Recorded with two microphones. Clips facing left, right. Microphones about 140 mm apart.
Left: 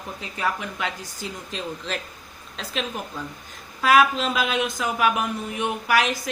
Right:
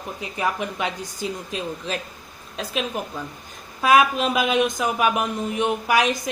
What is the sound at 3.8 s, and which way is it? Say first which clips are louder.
A woman's voice: right 1 dB; 15° right (ahead or behind).